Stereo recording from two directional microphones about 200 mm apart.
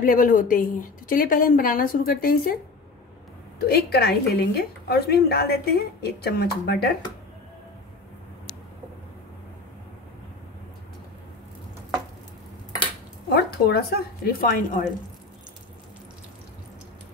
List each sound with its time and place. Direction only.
0.0 s a woman's voice: 45° left (ahead or behind)
13.3 s a woman's voice: 50° left (ahead or behind)